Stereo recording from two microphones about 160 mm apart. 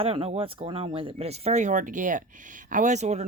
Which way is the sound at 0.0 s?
35° right (ahead or behind).